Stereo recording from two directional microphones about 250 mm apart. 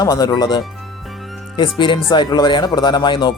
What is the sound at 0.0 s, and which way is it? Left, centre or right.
A man's voice, centre.